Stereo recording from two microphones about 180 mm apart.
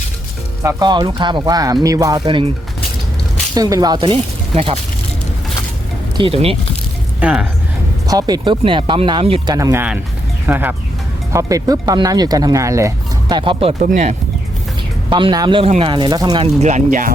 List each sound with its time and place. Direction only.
0.6 s speech: 20° right (ahead or behind)
3.5 s speech: 20° right (ahead or behind)
6.1 s speech: 30° right (ahead or behind)
7.2 s speech: 5° right (ahead or behind)
8.0 s speech: 20° right (ahead or behind)
9.6 s speech: 15° right (ahead or behind); by 14.2 s 45° right (ahead or behind)
15.1 s speech: 25° right (ahead or behind)
16.6 s speech: 40° right (ahead or behind)